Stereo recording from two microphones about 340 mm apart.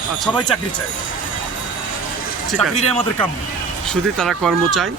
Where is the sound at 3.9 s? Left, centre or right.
Centre.